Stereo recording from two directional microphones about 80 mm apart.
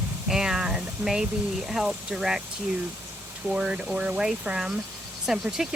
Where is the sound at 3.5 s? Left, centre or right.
Centre.